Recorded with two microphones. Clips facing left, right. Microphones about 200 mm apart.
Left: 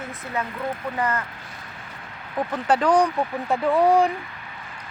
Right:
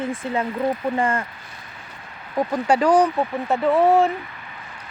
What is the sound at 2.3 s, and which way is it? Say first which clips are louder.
Speech: right 3 dB; 10° right (ahead or behind).